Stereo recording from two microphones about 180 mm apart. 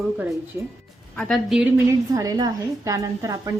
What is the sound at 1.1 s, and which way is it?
Speech, 5° left (ahead or behind).